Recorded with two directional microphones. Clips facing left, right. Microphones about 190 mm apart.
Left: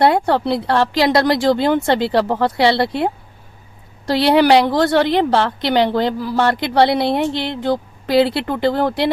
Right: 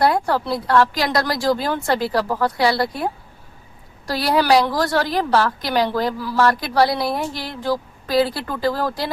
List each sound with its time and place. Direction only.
0.0 s a woman's voice: 25° left (ahead or behind)